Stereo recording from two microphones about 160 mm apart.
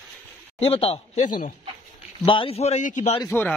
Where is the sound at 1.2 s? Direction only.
55° left (ahead or behind).